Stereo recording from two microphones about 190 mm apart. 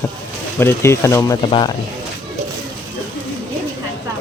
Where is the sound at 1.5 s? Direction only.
25° left (ahead or behind).